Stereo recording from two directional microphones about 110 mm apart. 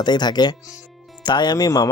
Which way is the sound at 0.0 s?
40° left (ahead or behind).